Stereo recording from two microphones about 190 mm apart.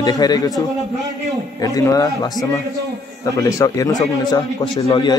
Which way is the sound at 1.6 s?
15° left (ahead or behind).